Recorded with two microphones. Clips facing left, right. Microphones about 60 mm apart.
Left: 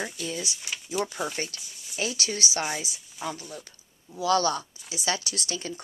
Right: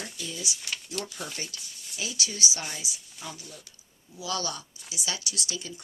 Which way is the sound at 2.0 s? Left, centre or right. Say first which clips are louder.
Left 3 dB; left.